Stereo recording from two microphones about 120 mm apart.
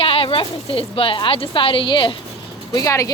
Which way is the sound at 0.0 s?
50° left (ahead or behind).